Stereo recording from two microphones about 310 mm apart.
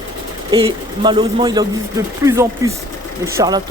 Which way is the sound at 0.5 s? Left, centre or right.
Centre.